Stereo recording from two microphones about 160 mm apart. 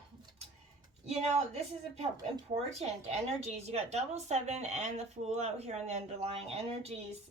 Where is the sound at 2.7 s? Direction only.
40° right (ahead or behind).